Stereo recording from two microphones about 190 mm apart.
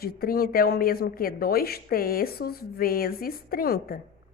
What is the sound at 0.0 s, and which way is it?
A woman's voice, 50° left (ahead or behind).